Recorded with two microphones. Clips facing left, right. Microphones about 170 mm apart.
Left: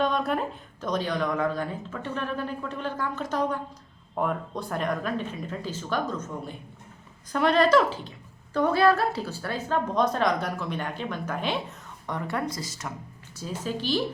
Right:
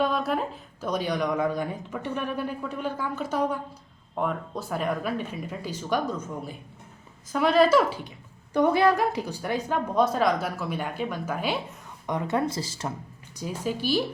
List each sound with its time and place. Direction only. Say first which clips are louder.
0.0 s speech: even; 5° right (ahead or behind)
12.0 s speech: right 4 dB; 20° right (ahead or behind)
13.3 s speech: right 2 dB; 15° right (ahead or behind)